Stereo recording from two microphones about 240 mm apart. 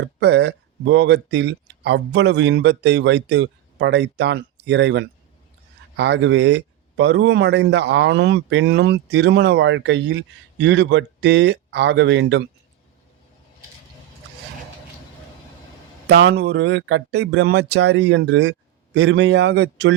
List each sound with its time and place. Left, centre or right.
0.0 s speech: right
16.0 s speech: right